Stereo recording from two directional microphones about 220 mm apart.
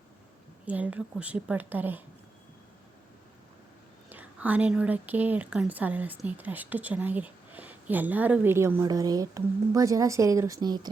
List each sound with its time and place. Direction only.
0.6 s a woman's voice: 5° right (ahead or behind)
4.1 s a woman's voice: 10° right (ahead or behind)